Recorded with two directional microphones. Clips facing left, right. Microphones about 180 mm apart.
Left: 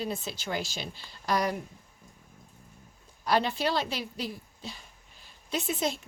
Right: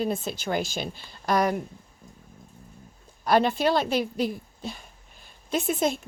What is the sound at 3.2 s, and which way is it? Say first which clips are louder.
A woman's voice: right 6 dB; 50° right (ahead or behind).